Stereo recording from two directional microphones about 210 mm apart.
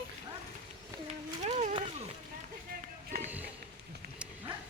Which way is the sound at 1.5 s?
35° right (ahead or behind).